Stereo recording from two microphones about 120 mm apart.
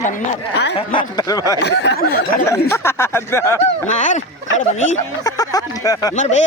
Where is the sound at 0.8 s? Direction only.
45° left (ahead or behind).